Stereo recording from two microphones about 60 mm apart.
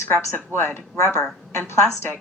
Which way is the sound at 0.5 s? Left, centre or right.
Left.